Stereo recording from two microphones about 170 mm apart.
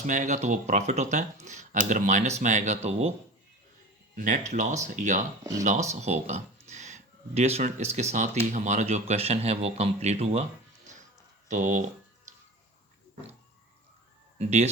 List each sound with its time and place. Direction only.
0.0 s speech: 45° right (ahead or behind)
4.1 s speech: 50° right (ahead or behind)
5.4 s speech: 20° right (ahead or behind)
5.6 s speech: 45° right (ahead or behind)
11.4 s speech: 45° right (ahead or behind)
14.3 s speech: 40° right (ahead or behind)